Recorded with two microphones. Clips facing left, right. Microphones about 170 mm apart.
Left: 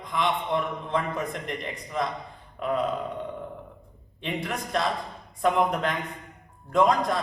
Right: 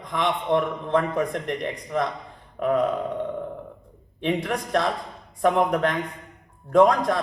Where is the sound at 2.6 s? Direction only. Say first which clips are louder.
Right 5 dB; 45° right (ahead or behind).